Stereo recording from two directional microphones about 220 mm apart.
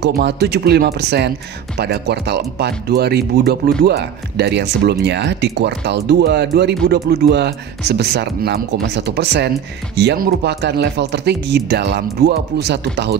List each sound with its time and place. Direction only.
0.0 s speech: 50° right (ahead or behind)